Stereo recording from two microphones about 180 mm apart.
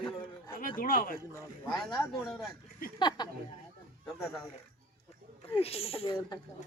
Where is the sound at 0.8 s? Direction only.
50° left (ahead or behind).